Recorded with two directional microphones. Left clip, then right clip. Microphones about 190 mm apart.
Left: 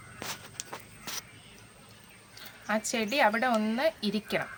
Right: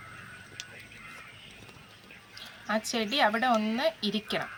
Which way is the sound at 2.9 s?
35° left (ahead or behind).